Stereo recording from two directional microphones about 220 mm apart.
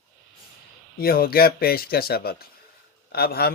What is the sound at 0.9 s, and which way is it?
Speech, 45° left (ahead or behind).